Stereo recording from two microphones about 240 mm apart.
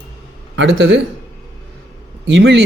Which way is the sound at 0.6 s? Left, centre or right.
Right.